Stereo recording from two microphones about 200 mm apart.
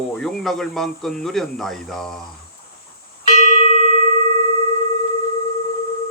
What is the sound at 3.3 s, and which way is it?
Bell, 35° left (ahead or behind).